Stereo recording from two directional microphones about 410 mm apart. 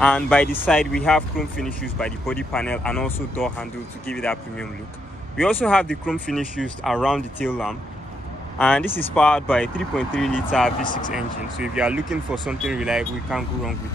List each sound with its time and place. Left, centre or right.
0.0 s speech: centre
10.8 s speech: centre
11.1 s speech: centre